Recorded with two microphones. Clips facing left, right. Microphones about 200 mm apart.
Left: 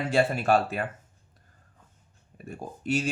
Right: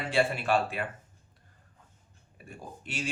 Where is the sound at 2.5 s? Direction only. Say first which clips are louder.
Left 13 dB; 40° left (ahead or behind).